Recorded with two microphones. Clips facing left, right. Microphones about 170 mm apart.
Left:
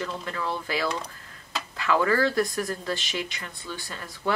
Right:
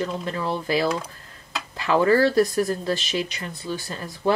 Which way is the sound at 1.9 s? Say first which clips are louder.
Right 5 dB; 30° right (ahead or behind).